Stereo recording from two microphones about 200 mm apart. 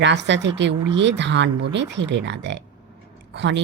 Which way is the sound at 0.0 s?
60° right (ahead or behind).